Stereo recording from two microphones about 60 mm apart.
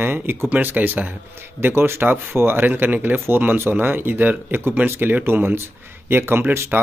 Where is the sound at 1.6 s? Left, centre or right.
Right.